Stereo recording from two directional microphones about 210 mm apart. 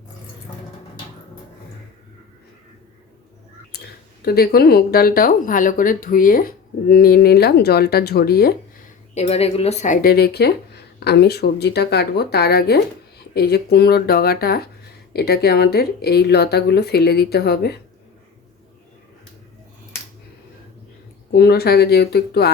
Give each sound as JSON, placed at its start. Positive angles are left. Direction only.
{"t": 3.7, "sound": "a sound", "side_deg": 50}
{"t": 4.3, "sound": "speech", "side_deg": 45}
{"t": 9.1, "sound": "speech", "side_deg": 30}
{"t": 21.3, "sound": "speech", "side_deg": 50}